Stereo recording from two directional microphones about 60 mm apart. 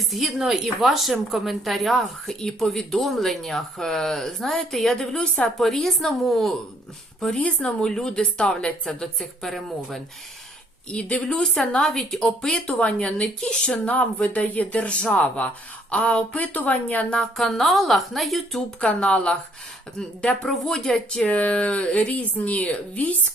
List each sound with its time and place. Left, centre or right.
0.1 s a woman's voice: centre
7.3 s a woman's voice: centre
10.8 s a woman's voice: centre
13.8 s speech: left
17.2 s a woman's voice: centre
18.8 s a woman's voice: centre
21.2 s speech: left